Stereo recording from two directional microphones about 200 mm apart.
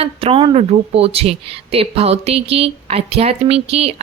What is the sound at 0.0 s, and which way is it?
Speech, 30° right (ahead or behind).